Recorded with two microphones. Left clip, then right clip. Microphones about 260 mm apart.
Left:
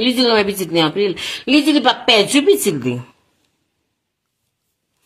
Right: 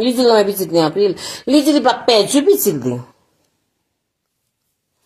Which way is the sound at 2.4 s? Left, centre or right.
Left.